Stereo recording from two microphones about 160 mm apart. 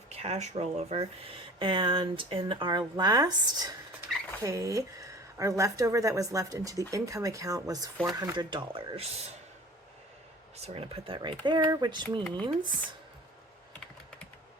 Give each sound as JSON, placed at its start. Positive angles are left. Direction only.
{"t": 0.1, "sound": "speech", "side_deg": -40}
{"t": 4.1, "sound": "rodents", "side_deg": 0}
{"t": 4.4, "sound": "a woman's voice", "side_deg": -20}
{"t": 10.6, "sound": "a woman's voice", "side_deg": -40}